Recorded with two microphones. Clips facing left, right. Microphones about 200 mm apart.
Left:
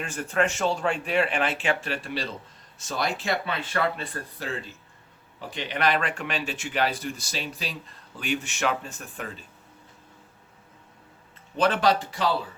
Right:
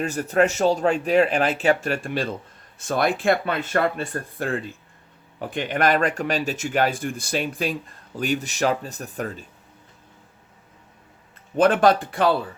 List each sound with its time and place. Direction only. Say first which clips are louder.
0.0 s speech: right 6 dB; 40° right (ahead or behind)
11.5 s speech: right 5 dB; 50° right (ahead or behind)